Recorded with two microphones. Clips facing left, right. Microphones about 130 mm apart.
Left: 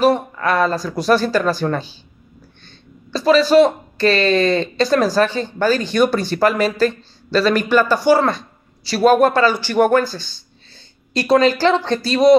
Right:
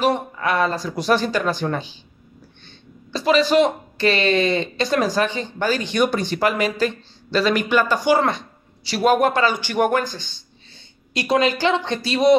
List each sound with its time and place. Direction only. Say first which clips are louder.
0.0 s speech: left 4 dB; 40° left (ahead or behind)
3.4 s speech: left 7 dB; 40° left (ahead or behind)
4.0 s speech: left 3 dB; 20° right (ahead or behind)
4.8 s speech: left 5 dB; 40° left (ahead or behind)
7.9 s speech: left 4 dB; 15° right (ahead or behind)
8.8 s speech: left 4 dB; 40° left (ahead or behind)
9.2 s speech: left 4 dB; 15° right (ahead or behind)
11.3 s speech: left 5 dB; 15° right (ahead or behind)
11.6 s speech: left 4 dB; 40° left (ahead or behind)